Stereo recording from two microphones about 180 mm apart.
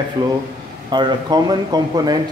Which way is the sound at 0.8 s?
25° right (ahead or behind).